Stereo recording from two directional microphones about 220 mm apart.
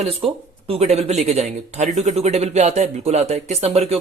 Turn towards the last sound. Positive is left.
turn(degrees=-30)  # may be behind; listen again after turning